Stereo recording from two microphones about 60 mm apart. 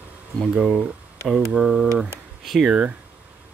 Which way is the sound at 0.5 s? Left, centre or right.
Centre.